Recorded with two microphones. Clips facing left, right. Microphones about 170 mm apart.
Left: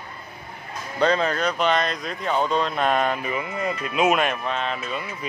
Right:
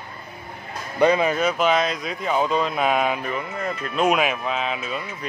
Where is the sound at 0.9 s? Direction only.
10° right (ahead or behind).